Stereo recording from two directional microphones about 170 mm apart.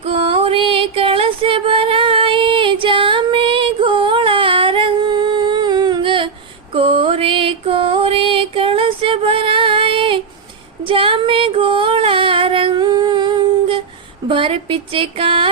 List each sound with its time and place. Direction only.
0.0 s a sound: 30° right (ahead or behind)
6.7 s music: 35° right (ahead or behind)
10.8 s female singing: 30° right (ahead or behind)
14.3 s speech: 30° right (ahead or behind)